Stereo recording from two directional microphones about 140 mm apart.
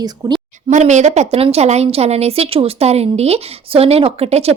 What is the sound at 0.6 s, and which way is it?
A woman's voice, 55° right (ahead or behind).